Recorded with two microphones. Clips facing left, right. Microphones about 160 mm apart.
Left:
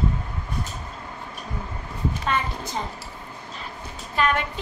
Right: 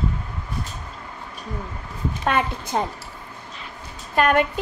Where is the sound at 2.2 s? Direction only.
60° right (ahead or behind).